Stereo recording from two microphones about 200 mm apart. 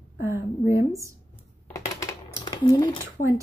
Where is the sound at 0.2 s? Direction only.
15° right (ahead or behind).